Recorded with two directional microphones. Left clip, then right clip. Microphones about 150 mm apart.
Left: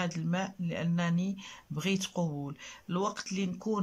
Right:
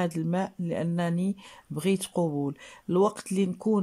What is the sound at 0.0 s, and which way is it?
Speech, 35° right (ahead or behind).